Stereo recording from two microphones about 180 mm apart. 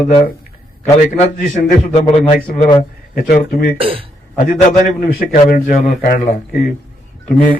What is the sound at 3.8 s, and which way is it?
Speech, 30° right (ahead or behind).